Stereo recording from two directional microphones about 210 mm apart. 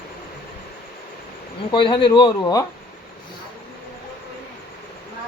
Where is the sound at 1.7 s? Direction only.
20° left (ahead or behind).